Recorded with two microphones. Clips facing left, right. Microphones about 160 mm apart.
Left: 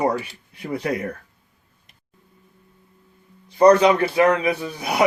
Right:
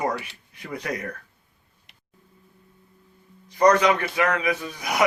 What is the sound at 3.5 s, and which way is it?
A man's voice, 30° left (ahead or behind).